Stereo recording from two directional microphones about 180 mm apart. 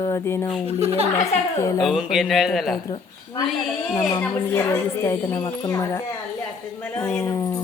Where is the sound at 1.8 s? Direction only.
Centre (ahead or behind).